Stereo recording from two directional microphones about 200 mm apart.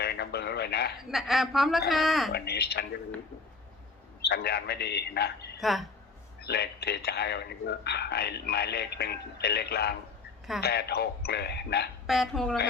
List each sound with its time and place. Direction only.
0.0 s a sound: 55° left (ahead or behind)
1.1 s a woman's voice: centre (ahead or behind)
2.3 s a man's voice: 55° left (ahead or behind)
4.2 s a man's voice: 55° left (ahead or behind)
5.5 s speech: centre (ahead or behind)
6.4 s a man's voice: 55° left (ahead or behind)
12.0 s a woman's voice: centre (ahead or behind)